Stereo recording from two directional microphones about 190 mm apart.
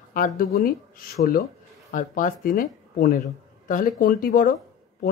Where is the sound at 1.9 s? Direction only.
45° left (ahead or behind).